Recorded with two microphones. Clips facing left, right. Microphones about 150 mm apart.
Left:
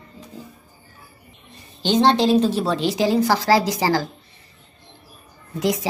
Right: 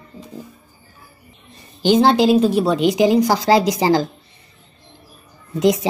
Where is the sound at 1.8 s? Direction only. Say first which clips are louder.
Right 3 dB; 10° right (ahead or behind).